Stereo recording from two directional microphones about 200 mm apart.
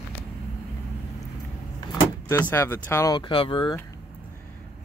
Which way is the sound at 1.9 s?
15° left (ahead or behind).